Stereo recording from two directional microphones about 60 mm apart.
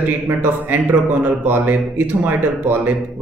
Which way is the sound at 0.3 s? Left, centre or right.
Right.